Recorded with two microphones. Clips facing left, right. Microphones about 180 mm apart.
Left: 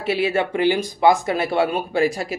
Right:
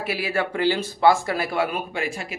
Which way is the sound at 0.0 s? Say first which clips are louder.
Left 5 dB; 25° left (ahead or behind).